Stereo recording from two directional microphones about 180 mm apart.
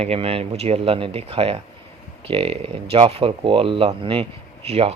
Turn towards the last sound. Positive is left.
turn(degrees=-35)  # may be behind; listen again after turning